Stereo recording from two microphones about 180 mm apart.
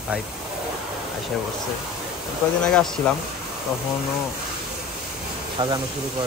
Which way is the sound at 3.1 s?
5° left (ahead or behind).